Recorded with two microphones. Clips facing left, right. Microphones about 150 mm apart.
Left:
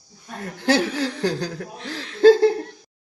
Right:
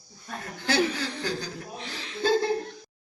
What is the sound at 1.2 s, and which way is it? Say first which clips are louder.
Speech: left 8 dB; 80° left.